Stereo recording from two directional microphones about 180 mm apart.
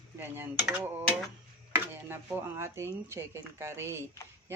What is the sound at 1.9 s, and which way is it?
Speech, 10° right (ahead or behind).